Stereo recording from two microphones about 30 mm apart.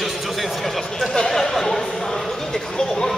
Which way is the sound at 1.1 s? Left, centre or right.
Centre.